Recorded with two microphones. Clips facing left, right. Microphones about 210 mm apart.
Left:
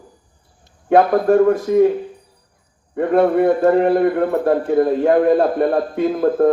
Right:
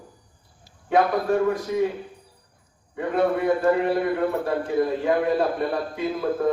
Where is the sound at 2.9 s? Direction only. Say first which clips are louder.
Left 8 dB; 55° left (ahead or behind).